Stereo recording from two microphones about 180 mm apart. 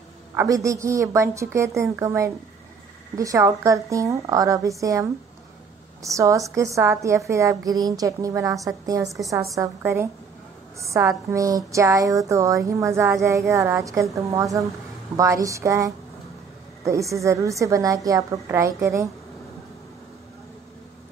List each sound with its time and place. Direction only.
0.3 s a woman's voice: 15° right (ahead or behind)
6.0 s a woman's voice: 15° right (ahead or behind)